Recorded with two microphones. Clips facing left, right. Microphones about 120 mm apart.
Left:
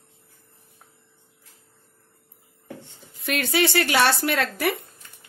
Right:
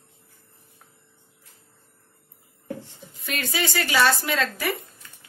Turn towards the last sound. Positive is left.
turn(degrees=65)  # may be behind; listen again after turning